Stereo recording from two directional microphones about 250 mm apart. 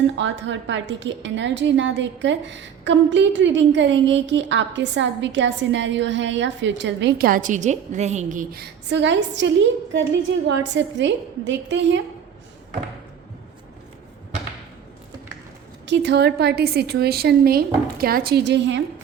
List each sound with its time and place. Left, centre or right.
0.2 s a woman's voice: right
8.9 s a woman's voice: right
15.9 s a woman's voice: right